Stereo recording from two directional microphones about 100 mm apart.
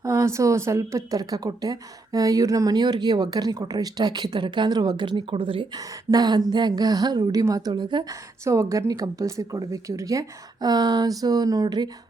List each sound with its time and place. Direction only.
0.0 s speech: 30° right (ahead or behind); by 5.6 s 60° right (ahead or behind)
5.7 s speech: 35° right (ahead or behind)
6.5 s a sound: 45° right (ahead or behind)
7.4 s speech: 35° right (ahead or behind)
8.1 s speech: 30° right (ahead or behind)